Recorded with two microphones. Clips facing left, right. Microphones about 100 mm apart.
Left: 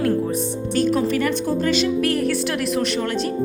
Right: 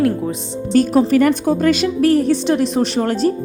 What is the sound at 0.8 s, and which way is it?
A woman's voice, 45° right (ahead or behind).